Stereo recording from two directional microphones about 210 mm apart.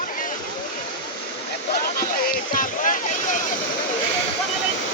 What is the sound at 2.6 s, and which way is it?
Boat, 40° left (ahead or behind).